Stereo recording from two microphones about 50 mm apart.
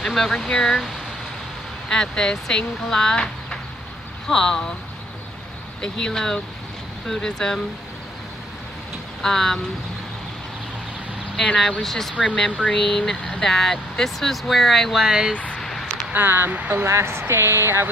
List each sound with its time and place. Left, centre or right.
0.0 s speech: centre
1.9 s speech: centre
5.8 s speech: centre
9.2 s speech: centre
11.3 s speech: centre
15.0 s speech: centre
15.3 s speech: left
15.6 s a sound: centre
16.2 s speech: right
16.5 s speech: right
16.8 s a woman's voice: right